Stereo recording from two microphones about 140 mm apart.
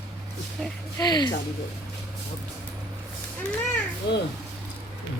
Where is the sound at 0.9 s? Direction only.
30° left (ahead or behind).